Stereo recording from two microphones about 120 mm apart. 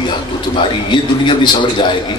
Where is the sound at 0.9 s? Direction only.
40° left (ahead or behind).